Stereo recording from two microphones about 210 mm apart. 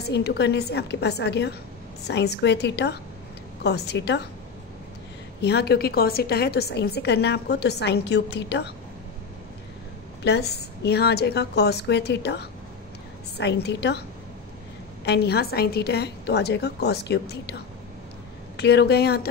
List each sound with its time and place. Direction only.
0.0 s a woman's voice: 50° left (ahead or behind)
5.4 s a woman's voice: 50° left (ahead or behind)
10.2 s a woman's voice: 50° left (ahead or behind)
15.0 s a woman's voice: 50° left (ahead or behind)
18.6 s a woman's voice: 50° left (ahead or behind)